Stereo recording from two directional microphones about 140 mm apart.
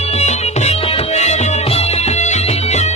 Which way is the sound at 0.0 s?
50° left (ahead or behind).